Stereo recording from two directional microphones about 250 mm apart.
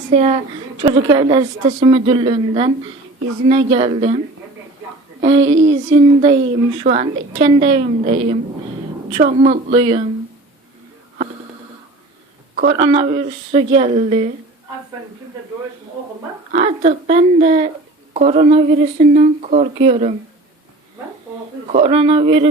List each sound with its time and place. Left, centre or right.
0.1 s a woman's voice: right
5.4 s a sound: right
5.8 s speech: centre
12.5 s speech: right
16.5 s speech: right
21.7 s speech: right